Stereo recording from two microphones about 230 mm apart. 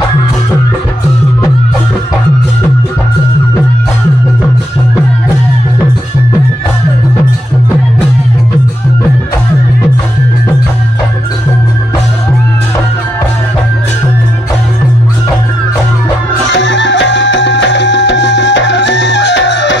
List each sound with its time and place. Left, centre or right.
16.5 s music: left